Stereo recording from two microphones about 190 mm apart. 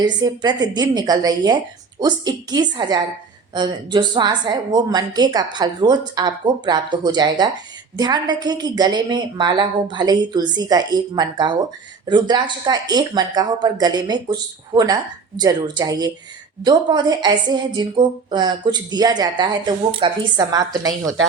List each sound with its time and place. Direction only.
0.0 s a woman's voice: 25° right (ahead or behind)